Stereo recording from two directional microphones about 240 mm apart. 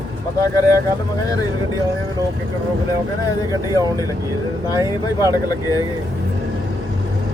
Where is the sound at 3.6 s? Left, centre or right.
Centre.